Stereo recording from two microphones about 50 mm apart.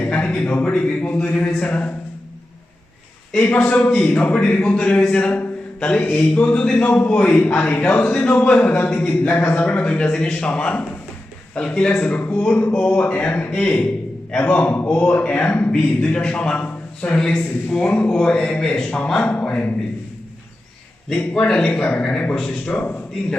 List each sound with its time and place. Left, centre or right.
0.0 s a sound: left
0.3 s a man's voice: left
3.3 s a man's voice: left
17.2 s a man's voice: centre
19.2 s a man's voice: left
21.3 s a man's voice: centre
21.7 s a man's voice: left